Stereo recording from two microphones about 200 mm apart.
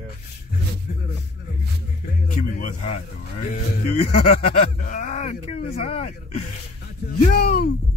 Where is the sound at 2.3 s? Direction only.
40° left (ahead or behind).